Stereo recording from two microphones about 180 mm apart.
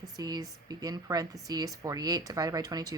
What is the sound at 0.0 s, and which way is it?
A woman's voice, 20° right (ahead or behind).